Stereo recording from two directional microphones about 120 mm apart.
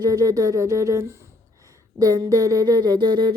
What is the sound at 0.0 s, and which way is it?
Speech, 30° right (ahead or behind).